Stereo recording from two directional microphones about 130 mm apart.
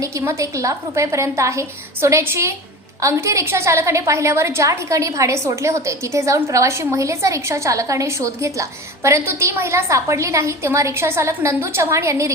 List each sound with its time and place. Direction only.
0.0 s a woman's voice: 25° right (ahead or behind)